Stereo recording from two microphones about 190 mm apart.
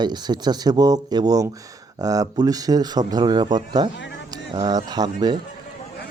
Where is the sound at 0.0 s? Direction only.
20° right (ahead or behind).